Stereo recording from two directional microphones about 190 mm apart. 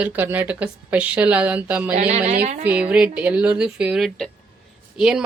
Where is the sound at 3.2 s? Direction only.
5° right (ahead or behind).